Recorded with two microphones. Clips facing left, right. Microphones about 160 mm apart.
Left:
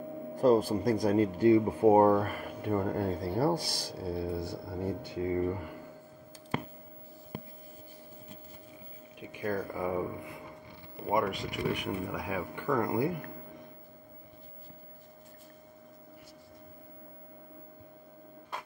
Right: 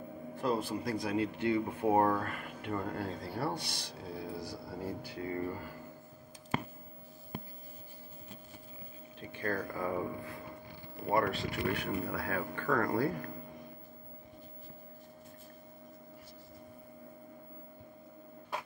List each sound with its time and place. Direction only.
0.4 s speech: 40° left (ahead or behind); by 3.1 s 25° left (ahead or behind)
3.3 s a man's voice: 40° left (ahead or behind); by 5.8 s 20° left (ahead or behind)
9.2 s speech: 15° left (ahead or behind)